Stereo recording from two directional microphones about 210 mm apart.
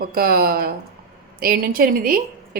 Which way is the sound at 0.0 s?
45° right (ahead or behind).